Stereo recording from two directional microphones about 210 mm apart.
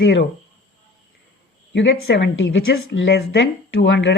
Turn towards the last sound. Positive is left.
turn(degrees=55)  # may be behind; listen again after turning